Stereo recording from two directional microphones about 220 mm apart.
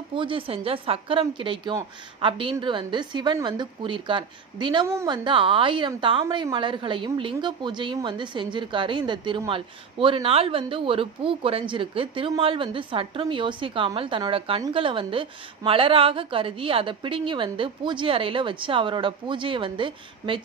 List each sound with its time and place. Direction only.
0.1 s speech: 25° right (ahead or behind)